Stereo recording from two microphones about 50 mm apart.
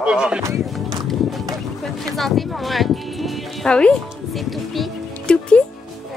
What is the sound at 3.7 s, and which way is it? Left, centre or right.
Speech, left.